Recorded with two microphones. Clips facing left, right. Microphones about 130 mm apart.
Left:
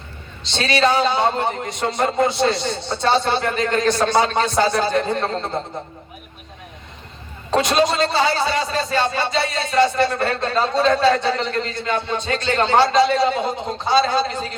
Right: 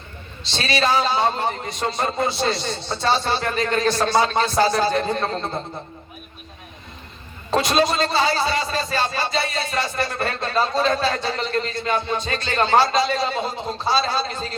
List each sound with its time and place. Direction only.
0.4 s a man's voice: 20° left (ahead or behind)
4.9 s a man's voice: 25° right (ahead or behind)
7.5 s a man's voice: 20° left (ahead or behind)